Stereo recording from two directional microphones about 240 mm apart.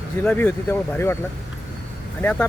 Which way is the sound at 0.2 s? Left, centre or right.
Centre.